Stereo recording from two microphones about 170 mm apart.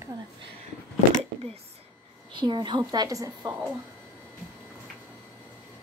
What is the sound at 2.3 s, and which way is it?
A woman's voice, 30° right (ahead or behind).